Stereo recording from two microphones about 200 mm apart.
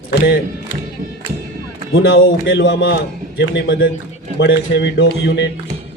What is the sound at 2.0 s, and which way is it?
A man's voice, 70° left (ahead or behind).